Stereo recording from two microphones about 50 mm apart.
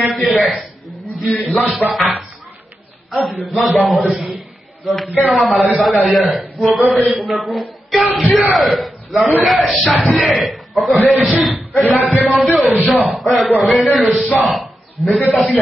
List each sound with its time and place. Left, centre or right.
0.0 s a sound: centre
1.2 s a man's voice: centre
1.8 s speech: left
3.1 s mantra: centre
3.4 s a man's voice: centre